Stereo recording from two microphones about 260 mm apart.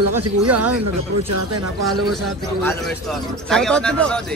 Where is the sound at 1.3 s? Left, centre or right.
Right.